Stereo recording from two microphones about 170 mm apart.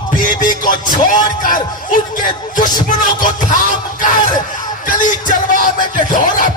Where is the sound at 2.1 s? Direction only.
50° left (ahead or behind).